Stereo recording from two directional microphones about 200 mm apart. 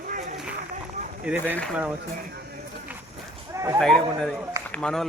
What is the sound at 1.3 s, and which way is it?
Speech, 5° right (ahead or behind).